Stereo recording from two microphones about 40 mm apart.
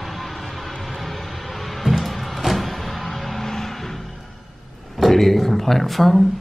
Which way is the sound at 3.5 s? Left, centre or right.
Centre.